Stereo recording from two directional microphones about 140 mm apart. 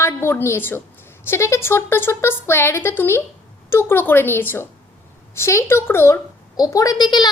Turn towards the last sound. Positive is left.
turn(degrees=30)  # may be behind; listen again after turning